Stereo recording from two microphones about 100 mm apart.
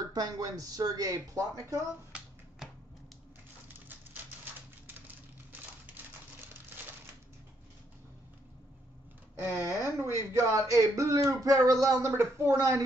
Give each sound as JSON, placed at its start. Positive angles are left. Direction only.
{"t": 0.1, "sound": "speech", "side_deg": -40}
{"t": 9.5, "sound": "speech", "side_deg": -35}